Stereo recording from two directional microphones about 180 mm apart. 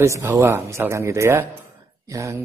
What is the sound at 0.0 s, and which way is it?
Speech, 15° right (ahead or behind).